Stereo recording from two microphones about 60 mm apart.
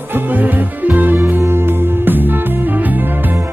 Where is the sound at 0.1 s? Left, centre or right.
Right.